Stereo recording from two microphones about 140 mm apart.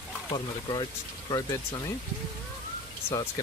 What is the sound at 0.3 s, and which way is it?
Speech, 30° left (ahead or behind).